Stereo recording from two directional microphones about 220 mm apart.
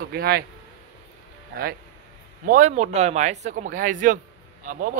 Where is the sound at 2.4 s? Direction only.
35° right (ahead or behind).